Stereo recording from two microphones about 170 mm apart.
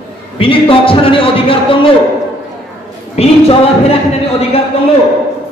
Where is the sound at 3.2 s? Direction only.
35° left (ahead or behind).